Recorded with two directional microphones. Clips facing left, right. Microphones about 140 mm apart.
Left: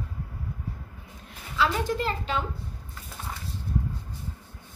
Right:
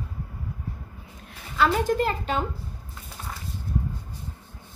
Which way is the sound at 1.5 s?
50° right (ahead or behind).